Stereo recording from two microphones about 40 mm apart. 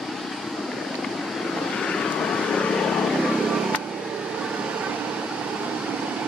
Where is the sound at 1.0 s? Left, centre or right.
Centre.